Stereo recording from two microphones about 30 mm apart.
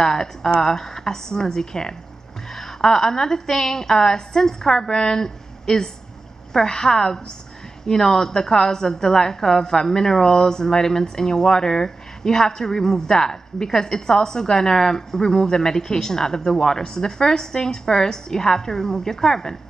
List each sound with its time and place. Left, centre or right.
0.0 s a woman's voice: centre